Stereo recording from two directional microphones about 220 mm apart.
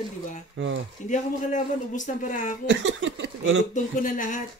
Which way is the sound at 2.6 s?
55° right (ahead or behind).